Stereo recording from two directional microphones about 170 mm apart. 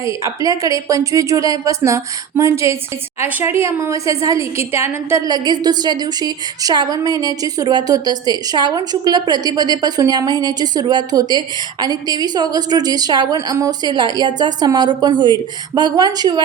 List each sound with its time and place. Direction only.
0.0 s a woman's voice: 20° right (ahead or behind)